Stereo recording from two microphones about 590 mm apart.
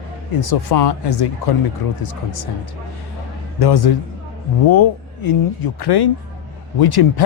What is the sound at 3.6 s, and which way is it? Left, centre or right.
Speech, left.